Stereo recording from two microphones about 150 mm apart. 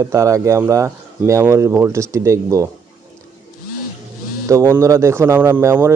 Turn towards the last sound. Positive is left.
turn(degrees=-15)  # may be behind; listen again after turning